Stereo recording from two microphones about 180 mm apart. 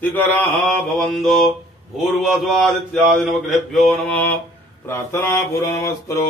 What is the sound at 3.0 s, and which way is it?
Mantra, centre (ahead or behind).